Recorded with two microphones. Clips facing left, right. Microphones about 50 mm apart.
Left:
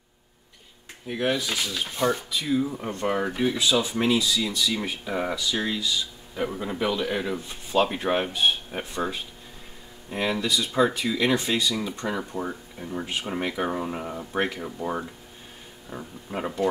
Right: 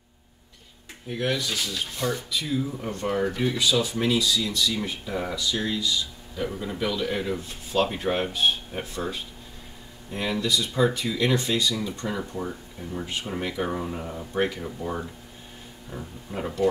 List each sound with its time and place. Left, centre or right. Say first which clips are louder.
1.0 s speech: left 1 dB; centre
1.7 s speech: left 3 dB; left
10.4 s speech: even; left